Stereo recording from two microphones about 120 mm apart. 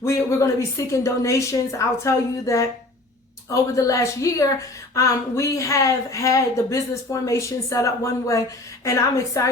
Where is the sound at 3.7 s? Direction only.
25° left (ahead or behind).